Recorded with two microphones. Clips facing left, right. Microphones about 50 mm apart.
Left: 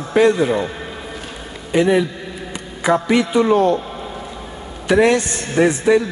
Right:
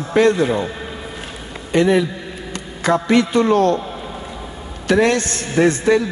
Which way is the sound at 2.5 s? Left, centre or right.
Centre.